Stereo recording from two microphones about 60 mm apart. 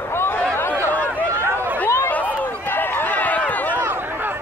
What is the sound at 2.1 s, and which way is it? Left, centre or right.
Run, left.